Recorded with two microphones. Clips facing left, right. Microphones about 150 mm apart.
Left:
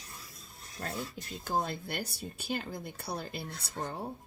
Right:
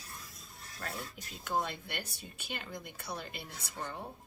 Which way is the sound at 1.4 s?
35° left (ahead or behind).